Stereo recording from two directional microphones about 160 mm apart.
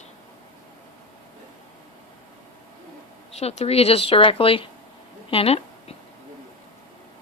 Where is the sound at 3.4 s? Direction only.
40° left (ahead or behind).